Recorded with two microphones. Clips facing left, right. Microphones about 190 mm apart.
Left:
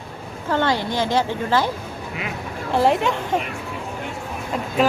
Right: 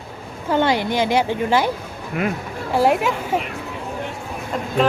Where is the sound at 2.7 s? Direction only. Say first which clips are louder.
Right 1 dB; 5° right (ahead or behind).